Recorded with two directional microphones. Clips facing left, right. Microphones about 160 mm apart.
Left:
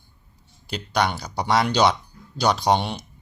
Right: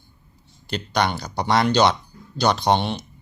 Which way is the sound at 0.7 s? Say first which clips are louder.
Right 1 dB; 5° left (ahead or behind).